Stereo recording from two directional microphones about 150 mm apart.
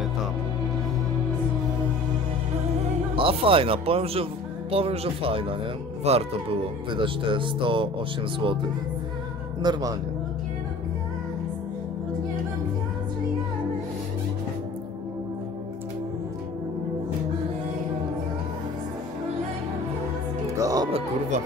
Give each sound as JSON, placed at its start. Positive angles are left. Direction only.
{"t": 3.2, "sound": "speech", "side_deg": -35}
{"t": 9.6, "sound": "a man's voice", "side_deg": -25}
{"t": 20.5, "sound": "music", "side_deg": -25}